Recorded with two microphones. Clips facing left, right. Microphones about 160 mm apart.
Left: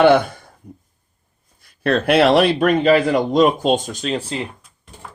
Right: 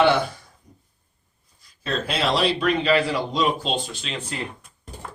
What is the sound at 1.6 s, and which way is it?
A man's voice, 65° left (ahead or behind).